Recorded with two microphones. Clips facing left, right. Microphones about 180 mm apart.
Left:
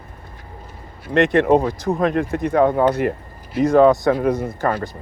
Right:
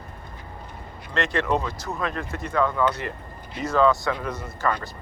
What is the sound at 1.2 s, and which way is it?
Speech, 55° left (ahead or behind).